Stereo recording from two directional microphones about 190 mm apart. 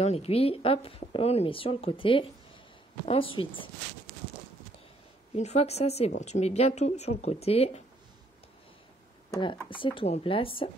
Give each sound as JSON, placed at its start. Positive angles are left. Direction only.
{"t": 0.0, "sound": "a woman's voice", "side_deg": 35}
{"t": 5.3, "sound": "a woman's voice", "side_deg": 35}
{"t": 9.7, "sound": "speech", "side_deg": 25}